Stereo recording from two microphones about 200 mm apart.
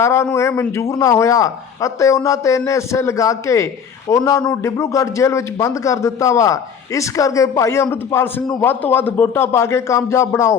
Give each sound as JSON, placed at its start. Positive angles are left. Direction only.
{"t": 0.0, "sound": "speech", "side_deg": 15}